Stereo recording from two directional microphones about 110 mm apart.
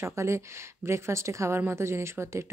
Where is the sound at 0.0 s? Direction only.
25° right (ahead or behind).